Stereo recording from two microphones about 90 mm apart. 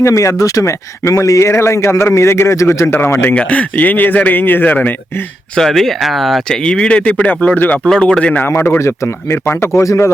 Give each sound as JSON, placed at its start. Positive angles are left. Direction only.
{"t": 0.0, "sound": "speech", "side_deg": 35}
{"t": 3.3, "sound": "a man's voice", "side_deg": 15}
{"t": 5.5, "sound": "speech", "side_deg": 0}
{"t": 7.9, "sound": "speech", "side_deg": 5}
{"t": 8.4, "sound": "a man's voice", "side_deg": 25}